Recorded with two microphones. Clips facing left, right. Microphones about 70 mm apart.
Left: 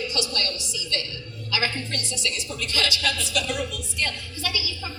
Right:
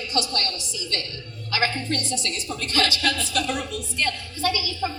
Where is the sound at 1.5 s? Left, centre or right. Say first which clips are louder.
Right 3 dB; right.